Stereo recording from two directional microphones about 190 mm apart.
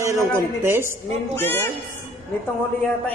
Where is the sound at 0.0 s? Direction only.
15° right (ahead or behind).